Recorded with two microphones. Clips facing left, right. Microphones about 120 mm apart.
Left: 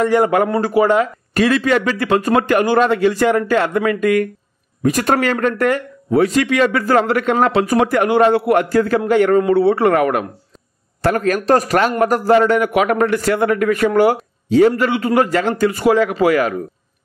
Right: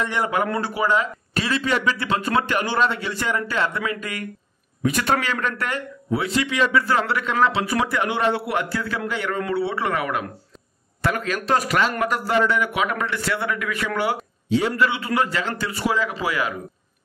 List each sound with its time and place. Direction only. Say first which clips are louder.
0.0 s speech: left 9 dB; 45° left (ahead or behind)